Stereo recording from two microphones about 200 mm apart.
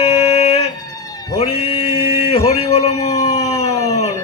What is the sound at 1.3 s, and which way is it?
Mantra, 30° left (ahead or behind).